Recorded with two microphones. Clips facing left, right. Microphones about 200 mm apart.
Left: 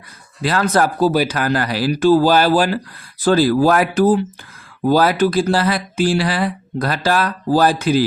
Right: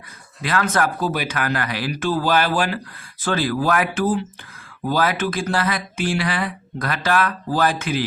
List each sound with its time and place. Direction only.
0.4 s speech: 35° left (ahead or behind)